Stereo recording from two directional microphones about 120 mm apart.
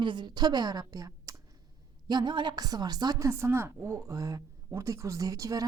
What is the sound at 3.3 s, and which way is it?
Speech, 20° right (ahead or behind).